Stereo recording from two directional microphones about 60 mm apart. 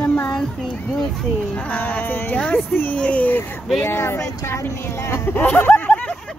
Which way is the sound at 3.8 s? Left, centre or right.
Left.